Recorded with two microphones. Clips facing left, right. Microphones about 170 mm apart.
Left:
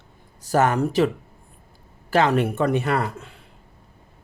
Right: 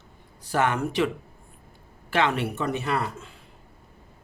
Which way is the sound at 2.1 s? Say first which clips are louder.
Left 5 dB; 40° left (ahead or behind).